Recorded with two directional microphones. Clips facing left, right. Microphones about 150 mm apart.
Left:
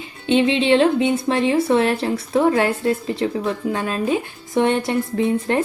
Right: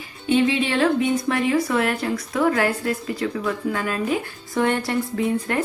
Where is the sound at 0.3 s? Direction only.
25° left (ahead or behind).